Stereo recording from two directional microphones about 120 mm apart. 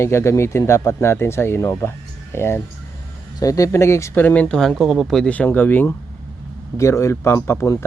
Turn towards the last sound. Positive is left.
turn(degrees=25)  # may be behind; listen again after turning